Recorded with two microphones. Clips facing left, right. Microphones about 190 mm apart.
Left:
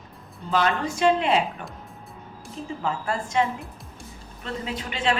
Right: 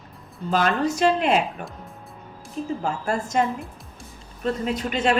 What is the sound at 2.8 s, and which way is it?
A woman's voice, 45° right (ahead or behind).